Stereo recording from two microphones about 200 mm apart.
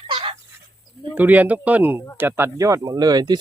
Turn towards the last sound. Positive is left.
turn(degrees=-20)  # may be behind; listen again after turning